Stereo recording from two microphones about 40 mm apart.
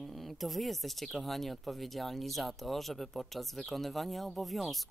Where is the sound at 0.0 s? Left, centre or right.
Centre.